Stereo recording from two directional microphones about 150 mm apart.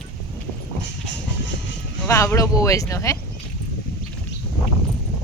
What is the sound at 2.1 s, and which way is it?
Speech, 20° left (ahead or behind).